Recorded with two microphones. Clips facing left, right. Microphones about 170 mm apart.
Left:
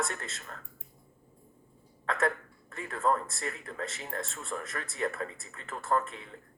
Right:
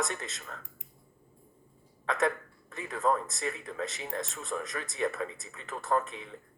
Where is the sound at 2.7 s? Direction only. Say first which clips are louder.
Even; 20° right (ahead or behind).